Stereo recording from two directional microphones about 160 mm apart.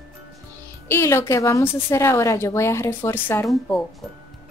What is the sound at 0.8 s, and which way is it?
A woman's voice, 15° left (ahead or behind).